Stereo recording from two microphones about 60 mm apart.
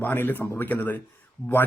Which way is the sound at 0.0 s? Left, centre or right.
Left.